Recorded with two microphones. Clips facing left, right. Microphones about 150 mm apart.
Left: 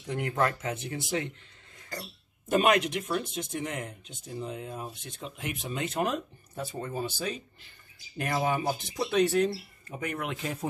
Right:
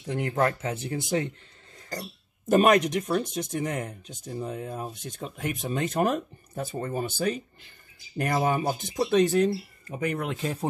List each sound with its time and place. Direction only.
0.1 s speech: 30° right (ahead or behind); by 7.1 s 55° right (ahead or behind)
8.2 s speech: 40° right (ahead or behind)